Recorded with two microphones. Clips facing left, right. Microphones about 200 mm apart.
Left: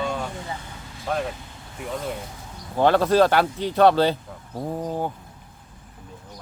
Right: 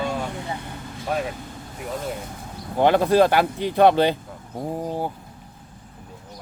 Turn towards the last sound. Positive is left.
turn(degrees=-10)  # may be behind; listen again after turning